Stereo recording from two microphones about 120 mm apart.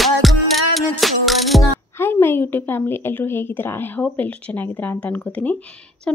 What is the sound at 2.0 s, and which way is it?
Speech, 15° left (ahead or behind).